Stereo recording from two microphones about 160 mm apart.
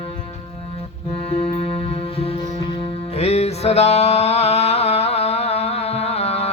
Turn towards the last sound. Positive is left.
turn(degrees=40)  # may be behind; listen again after turning